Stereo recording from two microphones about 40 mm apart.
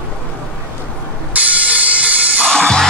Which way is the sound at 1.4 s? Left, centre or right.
Right.